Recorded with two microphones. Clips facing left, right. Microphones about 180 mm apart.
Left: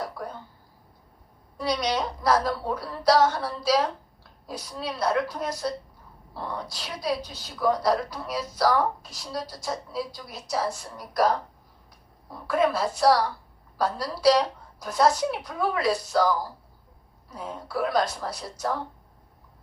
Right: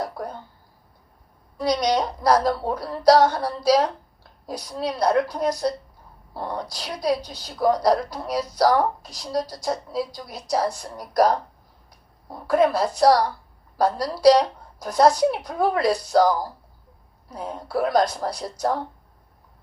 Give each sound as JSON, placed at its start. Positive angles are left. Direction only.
{"t": 0.0, "sound": "a sound", "side_deg": -40}
{"t": 1.5, "sound": "a woman's voice", "side_deg": -40}
{"t": 12.5, "sound": "a woman's voice", "side_deg": -40}